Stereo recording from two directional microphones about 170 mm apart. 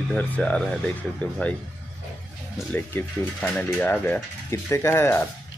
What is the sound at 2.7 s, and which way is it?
Speech, 10° left (ahead or behind).